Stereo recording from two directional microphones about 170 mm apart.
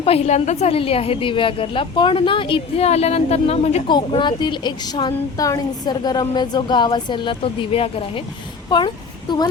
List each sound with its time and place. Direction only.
0.0 s a woman's voice: 35° left (ahead or behind)
3.9 s a woman's voice: 25° left (ahead or behind)